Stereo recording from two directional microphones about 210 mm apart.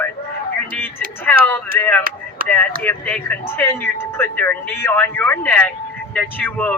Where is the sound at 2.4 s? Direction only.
45° right (ahead or behind).